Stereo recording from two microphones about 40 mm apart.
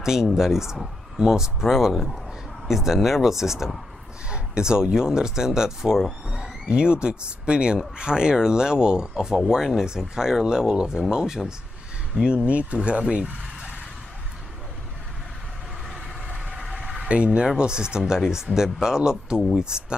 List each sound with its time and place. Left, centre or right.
0.0 s speech: centre
4.3 s speech: right
6.7 s speech: right
12.5 s speech: right
16.7 s a sound: centre
17.0 s speech: right